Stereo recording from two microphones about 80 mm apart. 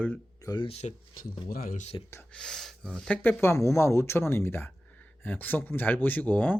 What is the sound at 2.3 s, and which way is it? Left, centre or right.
Speech, centre.